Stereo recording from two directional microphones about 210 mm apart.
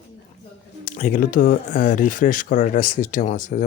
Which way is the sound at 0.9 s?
35° left (ahead or behind).